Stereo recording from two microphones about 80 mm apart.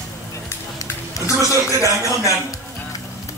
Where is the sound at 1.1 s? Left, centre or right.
Left.